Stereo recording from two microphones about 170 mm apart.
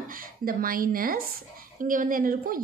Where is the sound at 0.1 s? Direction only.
60° right (ahead or behind).